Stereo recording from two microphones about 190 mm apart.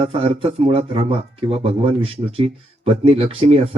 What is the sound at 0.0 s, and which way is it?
Speech, 30° right (ahead or behind).